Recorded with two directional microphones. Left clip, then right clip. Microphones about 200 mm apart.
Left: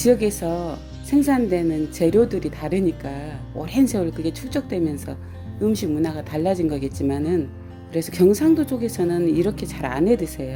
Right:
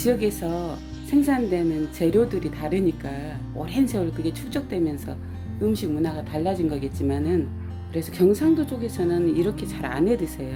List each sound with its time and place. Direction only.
0.0 s a woman's voice: 25° left (ahead or behind)
5.7 s a woman's voice: 35° left (ahead or behind)